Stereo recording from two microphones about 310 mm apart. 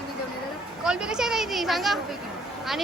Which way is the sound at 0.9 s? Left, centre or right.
Centre.